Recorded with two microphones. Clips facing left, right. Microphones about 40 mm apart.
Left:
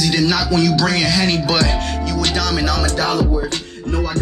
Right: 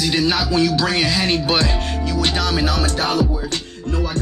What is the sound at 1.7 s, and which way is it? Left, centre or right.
Music, left.